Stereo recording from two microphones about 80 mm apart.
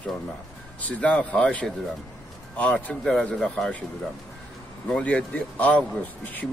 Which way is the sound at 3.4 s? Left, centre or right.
Centre.